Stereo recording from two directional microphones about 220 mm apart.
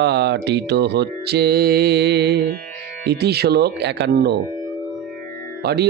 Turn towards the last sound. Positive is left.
turn(degrees=-50)  # may be behind; listen again after turning